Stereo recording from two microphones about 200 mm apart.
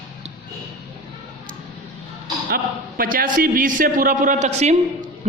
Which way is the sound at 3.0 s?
45° right (ahead or behind).